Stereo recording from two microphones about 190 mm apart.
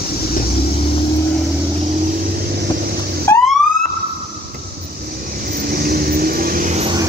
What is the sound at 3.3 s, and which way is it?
Police car, 15° left (ahead or behind).